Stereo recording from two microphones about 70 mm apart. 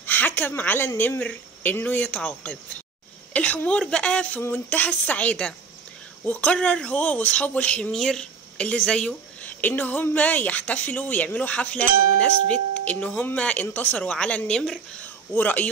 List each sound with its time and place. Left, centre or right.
0.0 s a sound: left
0.5 s a woman's voice: left
1.2 s speech: left
4.4 s a woman's voice: left
4.7 s speech: left
9.4 s speech: left
15.3 s speech: left